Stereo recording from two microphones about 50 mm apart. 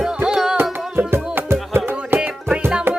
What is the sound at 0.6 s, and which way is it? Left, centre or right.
Music, right.